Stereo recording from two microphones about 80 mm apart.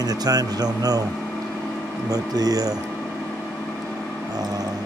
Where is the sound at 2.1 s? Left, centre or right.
Right.